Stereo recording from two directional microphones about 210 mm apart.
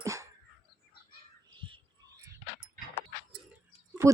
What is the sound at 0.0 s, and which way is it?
Dog, 15° right (ahead or behind).